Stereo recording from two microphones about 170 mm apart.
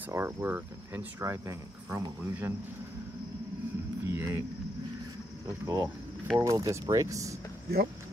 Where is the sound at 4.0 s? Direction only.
15° right (ahead or behind).